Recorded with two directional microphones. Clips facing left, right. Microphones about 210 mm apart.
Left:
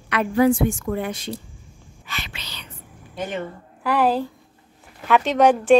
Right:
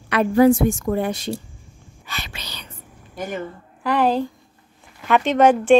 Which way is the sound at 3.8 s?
5° left (ahead or behind).